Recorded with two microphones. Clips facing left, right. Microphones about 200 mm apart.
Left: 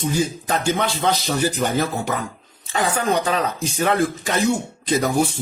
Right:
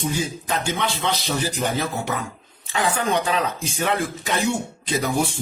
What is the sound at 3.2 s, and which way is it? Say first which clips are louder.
Speech: left 2 dB; 40° left (ahead or behind).